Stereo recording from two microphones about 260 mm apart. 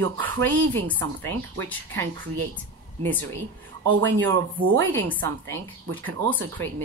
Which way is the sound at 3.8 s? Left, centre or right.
Right.